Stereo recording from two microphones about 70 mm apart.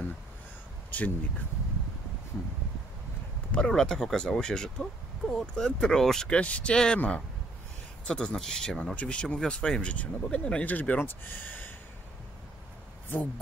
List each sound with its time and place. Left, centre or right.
0.9 s speech: left
3.5 s speech: centre; by 11.7 s left